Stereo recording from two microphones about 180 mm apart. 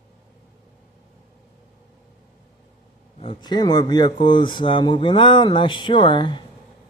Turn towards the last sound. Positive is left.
turn(degrees=25)  # may be behind; listen again after turning